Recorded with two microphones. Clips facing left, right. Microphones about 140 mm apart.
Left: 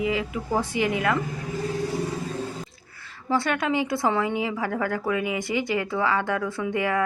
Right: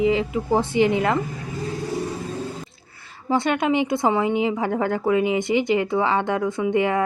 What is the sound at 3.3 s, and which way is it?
A woman's voice, 20° right (ahead or behind).